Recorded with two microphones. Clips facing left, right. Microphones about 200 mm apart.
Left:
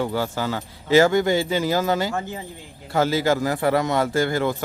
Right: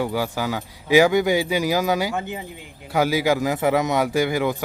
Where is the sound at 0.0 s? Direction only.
10° right (ahead or behind).